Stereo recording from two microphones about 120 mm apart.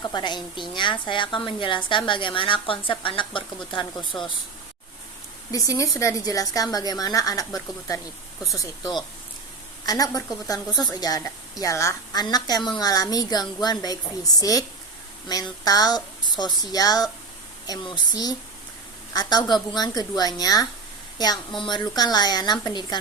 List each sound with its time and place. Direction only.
0.1 s a woman's voice: 40° left (ahead or behind)
3.9 s speech: 5° left (ahead or behind)
5.5 s a woman's voice: 30° left (ahead or behind)
9.8 s a woman's voice: 30° left (ahead or behind)
15.6 s a woman's voice: 30° left (ahead or behind)